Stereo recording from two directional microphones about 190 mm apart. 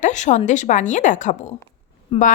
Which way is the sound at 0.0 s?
40° left (ahead or behind).